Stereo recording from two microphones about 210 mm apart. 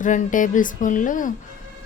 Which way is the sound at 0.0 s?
40° left (ahead or behind).